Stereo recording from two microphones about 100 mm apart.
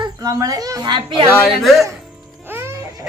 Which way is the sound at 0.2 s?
35° right (ahead or behind).